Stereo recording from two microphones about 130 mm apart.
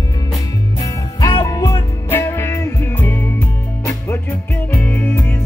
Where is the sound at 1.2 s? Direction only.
30° left (ahead or behind).